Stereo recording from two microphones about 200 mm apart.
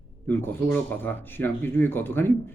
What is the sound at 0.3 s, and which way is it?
Speech, 10° left (ahead or behind).